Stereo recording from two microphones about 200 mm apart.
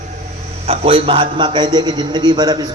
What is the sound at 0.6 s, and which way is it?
A man's voice, 30° right (ahead or behind).